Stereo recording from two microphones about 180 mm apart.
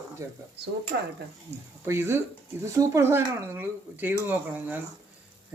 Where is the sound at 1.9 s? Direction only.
15° right (ahead or behind).